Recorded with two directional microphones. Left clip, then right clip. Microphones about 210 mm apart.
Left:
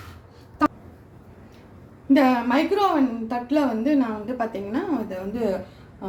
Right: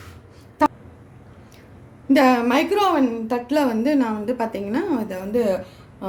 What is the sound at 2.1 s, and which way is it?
A woman's voice, 55° right (ahead or behind).